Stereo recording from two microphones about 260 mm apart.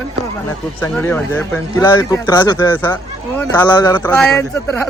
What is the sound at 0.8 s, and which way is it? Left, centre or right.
Speech, centre.